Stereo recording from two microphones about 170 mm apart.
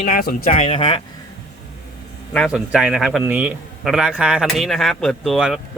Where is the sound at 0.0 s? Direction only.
60° left (ahead or behind).